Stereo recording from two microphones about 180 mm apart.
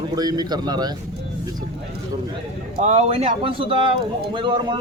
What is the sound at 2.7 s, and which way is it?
A man's voice, 40° right (ahead or behind).